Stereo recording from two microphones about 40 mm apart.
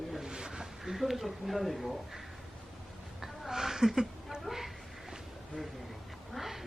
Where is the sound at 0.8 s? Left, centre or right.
Centre.